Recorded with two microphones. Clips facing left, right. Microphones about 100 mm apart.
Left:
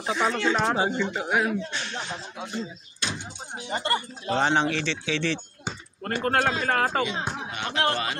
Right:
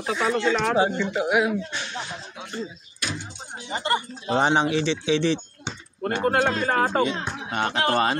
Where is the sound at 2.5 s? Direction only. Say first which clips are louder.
Right 4 dB; 20° left (ahead or behind).